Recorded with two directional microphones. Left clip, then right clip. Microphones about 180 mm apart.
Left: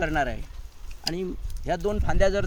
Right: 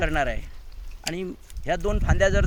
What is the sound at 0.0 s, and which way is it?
Speech, 15° right (ahead or behind).